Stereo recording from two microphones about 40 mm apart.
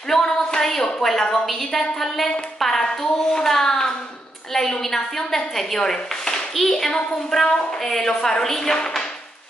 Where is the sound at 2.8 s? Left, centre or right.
Centre.